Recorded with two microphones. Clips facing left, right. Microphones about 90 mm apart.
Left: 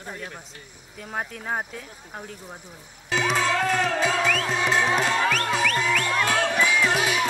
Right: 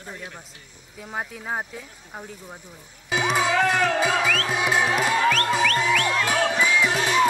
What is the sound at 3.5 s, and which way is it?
Music, 70° right (ahead or behind).